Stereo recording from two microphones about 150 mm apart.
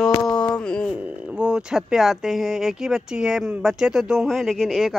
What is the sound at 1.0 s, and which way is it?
Speech, 10° right (ahead or behind).